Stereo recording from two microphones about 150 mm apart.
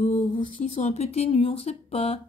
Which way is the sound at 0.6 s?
50° left (ahead or behind).